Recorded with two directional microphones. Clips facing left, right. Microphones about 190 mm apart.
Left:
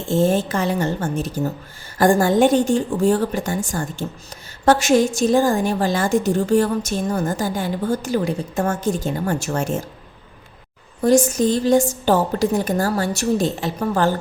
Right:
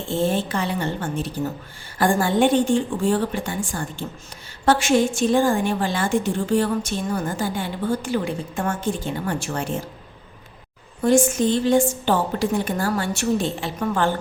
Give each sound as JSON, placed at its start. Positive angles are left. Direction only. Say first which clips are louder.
{"t": 0.0, "sound": "a woman's voice", "louder": "left 4 dB", "side_deg": 45}
{"t": 11.0, "sound": "a woman's voice", "louder": "left 2 dB", "side_deg": 40}